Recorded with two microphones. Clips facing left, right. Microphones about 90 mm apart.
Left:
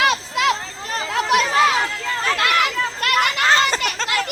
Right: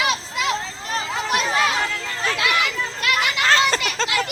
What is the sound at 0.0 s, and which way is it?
Children playing, 65° left (ahead or behind).